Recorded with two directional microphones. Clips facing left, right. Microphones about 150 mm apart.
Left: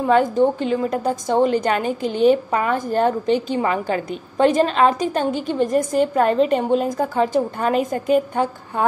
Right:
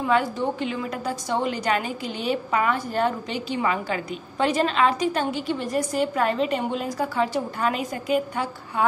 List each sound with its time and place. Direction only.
0.0 s a woman's voice: 45° left (ahead or behind)